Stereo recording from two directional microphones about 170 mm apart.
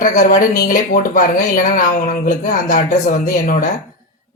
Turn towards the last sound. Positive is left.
turn(degrees=55)  # may be behind; listen again after turning